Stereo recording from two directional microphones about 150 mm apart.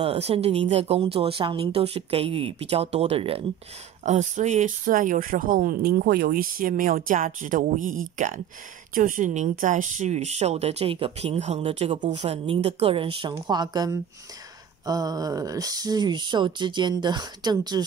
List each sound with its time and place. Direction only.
0.0 s a woman's voice: 40° right (ahead or behind)
4.0 s a woman's voice: 50° right (ahead or behind); by 17.8 s 25° right (ahead or behind)